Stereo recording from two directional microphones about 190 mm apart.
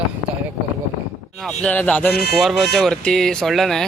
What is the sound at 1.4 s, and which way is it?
Speech, 5° left (ahead or behind).